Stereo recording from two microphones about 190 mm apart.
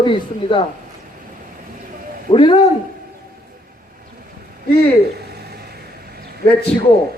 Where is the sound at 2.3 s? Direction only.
25° left (ahead or behind).